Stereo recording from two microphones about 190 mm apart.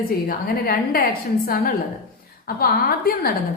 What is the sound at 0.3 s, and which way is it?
A woman's voice, 50° left (ahead or behind).